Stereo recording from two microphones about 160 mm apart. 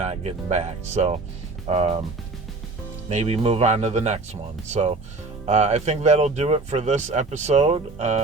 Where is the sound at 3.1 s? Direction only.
40° right (ahead or behind).